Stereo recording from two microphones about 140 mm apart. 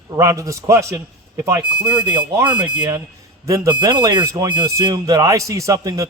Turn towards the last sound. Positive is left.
turn(degrees=-25)  # may be behind; listen again after turning